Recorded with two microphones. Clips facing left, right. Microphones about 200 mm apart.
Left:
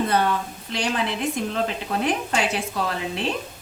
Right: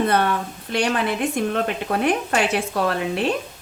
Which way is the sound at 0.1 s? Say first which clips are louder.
Right 2 dB; 60° right (ahead or behind).